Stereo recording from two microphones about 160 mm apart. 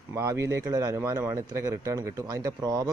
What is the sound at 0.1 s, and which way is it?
Speech, 20° right (ahead or behind).